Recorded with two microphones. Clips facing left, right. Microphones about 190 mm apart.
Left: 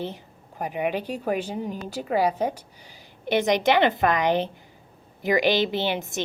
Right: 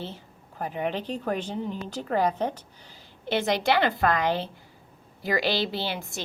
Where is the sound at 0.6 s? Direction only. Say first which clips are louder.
Left 3 dB; 15° left (ahead or behind).